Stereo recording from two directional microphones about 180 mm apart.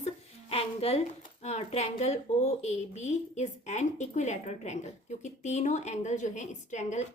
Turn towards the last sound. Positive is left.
turn(degrees=40)  # may be behind; listen again after turning